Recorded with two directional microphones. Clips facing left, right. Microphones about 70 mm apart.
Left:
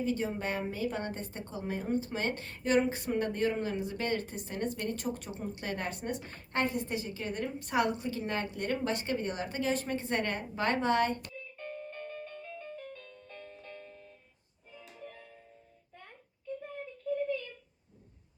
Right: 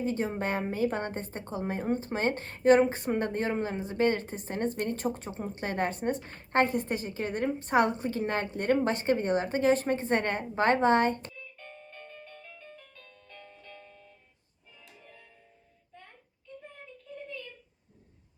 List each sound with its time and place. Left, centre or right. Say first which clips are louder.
0.0 s a woman's voice: right 2 dB; right
11.5 s doorbell: left 6 dB; left